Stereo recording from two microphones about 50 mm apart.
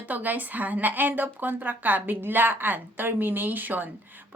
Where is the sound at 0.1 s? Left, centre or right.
Right.